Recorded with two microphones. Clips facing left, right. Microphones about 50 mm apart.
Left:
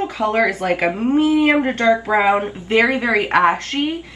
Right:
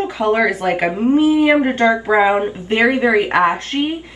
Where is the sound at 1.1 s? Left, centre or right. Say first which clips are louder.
Right 2 dB; left.